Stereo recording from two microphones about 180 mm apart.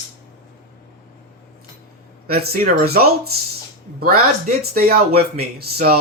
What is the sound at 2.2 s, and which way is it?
Speech, 60° right (ahead or behind).